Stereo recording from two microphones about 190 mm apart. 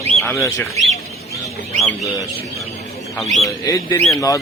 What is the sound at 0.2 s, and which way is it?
Speech, centre (ahead or behind).